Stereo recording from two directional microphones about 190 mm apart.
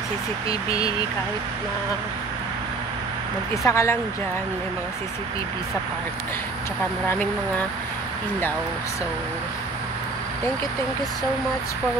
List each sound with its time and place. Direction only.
0.7 s speech: 20° left (ahead or behind)
3.6 s speech: 15° left (ahead or behind)